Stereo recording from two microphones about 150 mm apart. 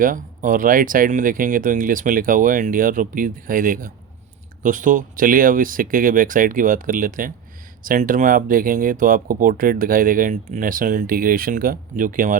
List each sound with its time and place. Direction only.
0.0 s speech: 65° right (ahead or behind)